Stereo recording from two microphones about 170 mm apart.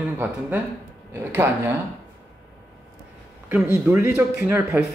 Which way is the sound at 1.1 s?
15° right (ahead or behind).